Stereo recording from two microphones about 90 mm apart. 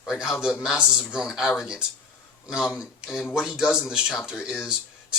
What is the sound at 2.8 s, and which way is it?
Speech, 5° right (ahead or behind).